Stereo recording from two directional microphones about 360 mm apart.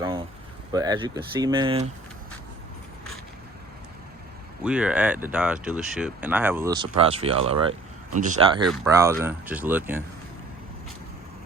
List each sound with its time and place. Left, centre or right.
0.7 s speech: centre
4.6 s speech: centre
8.6 s speech: centre